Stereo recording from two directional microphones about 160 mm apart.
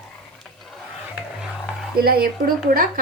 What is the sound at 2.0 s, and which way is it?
A woman's voice, 70° right (ahead or behind).